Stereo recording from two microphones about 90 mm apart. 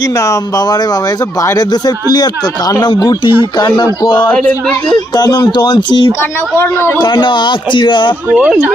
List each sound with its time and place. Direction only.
0.0 s speech: 40° left (ahead or behind); by 4.3 s 60° left (ahead or behind)
4.3 s speech: 15° left (ahead or behind)
5.1 s speech: 50° left (ahead or behind)
6.6 s a man's voice: 30° left (ahead or behind)
7.0 s speech: 60° left (ahead or behind)
8.3 s speech: 15° right (ahead or behind)